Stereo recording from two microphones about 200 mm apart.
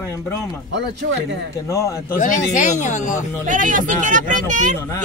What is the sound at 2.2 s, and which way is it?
Speech, 40° left (ahead or behind).